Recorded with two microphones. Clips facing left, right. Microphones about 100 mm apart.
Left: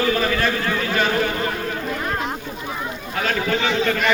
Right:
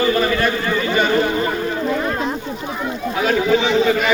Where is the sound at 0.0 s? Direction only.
5° right (ahead or behind).